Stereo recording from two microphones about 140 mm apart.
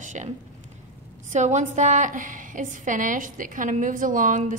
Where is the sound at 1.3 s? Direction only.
60° right (ahead or behind).